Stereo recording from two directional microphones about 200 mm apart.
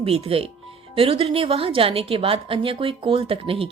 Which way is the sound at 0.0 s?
30° right (ahead or behind).